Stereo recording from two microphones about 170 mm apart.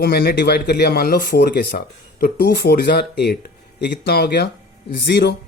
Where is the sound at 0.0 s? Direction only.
65° left (ahead or behind).